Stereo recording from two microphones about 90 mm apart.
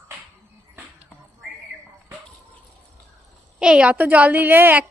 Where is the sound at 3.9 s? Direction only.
20° right (ahead or behind).